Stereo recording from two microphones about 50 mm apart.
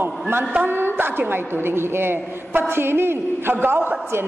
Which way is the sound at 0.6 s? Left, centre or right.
Right.